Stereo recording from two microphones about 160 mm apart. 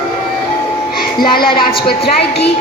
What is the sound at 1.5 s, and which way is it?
Speech, 35° left (ahead or behind).